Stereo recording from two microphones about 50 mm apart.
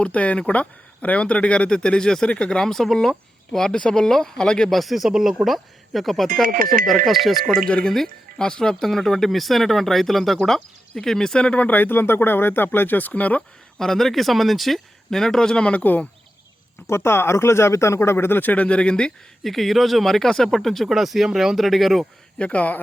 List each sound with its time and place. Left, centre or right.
0.0 s speech: left
4.7 s speech: centre
7.7 s speech: left
7.9 s speech: centre
11.3 s speech: left
13.7 s speech: centre
15.8 s speech: left
16.8 s speech: left
19.4 s speech: centre
22.4 s speech: left